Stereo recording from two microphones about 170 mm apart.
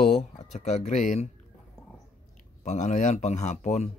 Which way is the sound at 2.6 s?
45° left (ahead or behind).